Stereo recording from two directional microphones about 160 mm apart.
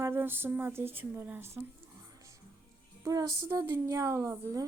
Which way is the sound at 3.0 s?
20° right (ahead or behind).